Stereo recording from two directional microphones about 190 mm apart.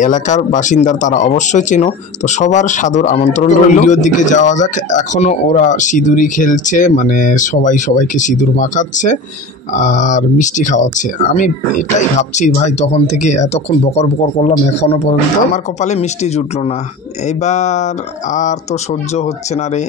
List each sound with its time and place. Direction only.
0.0 s speech: 40° left (ahead or behind)